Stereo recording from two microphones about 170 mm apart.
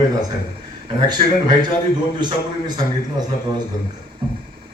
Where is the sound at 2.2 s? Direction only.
25° right (ahead or behind).